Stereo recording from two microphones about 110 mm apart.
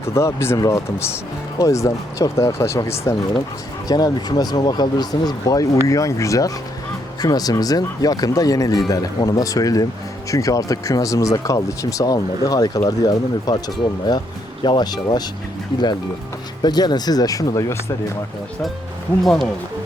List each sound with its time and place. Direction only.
0.1 s speech: 25° left (ahead or behind)
3.8 s speech: 35° left (ahead or behind)
16.6 s speech: 40° left (ahead or behind)
19.2 s speech: centre (ahead or behind)